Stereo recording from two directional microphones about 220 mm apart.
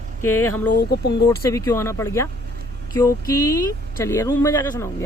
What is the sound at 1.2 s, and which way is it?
Speech, 10° left (ahead or behind).